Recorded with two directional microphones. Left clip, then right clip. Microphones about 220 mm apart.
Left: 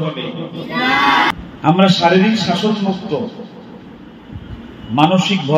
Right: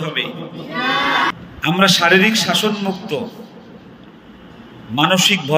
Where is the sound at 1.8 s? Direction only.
50° right (ahead or behind).